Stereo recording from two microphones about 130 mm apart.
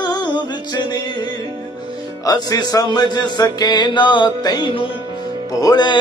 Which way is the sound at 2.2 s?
30° left (ahead or behind).